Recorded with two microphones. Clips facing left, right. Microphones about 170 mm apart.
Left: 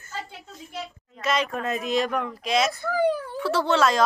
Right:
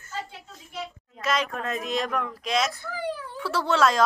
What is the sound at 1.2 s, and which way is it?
Speech, centre (ahead or behind).